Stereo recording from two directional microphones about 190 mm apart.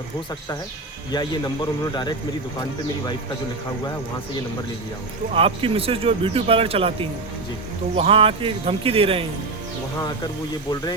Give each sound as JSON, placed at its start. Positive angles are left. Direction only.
{"t": 1.1, "sound": "a man's voice", "side_deg": 20}
{"t": 5.3, "sound": "speech", "side_deg": -30}